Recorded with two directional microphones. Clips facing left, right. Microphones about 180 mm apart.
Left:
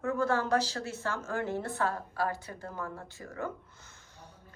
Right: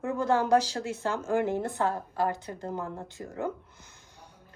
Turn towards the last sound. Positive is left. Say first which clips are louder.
# right 4 dB
turn(degrees=-15)  # may be behind; listen again after turning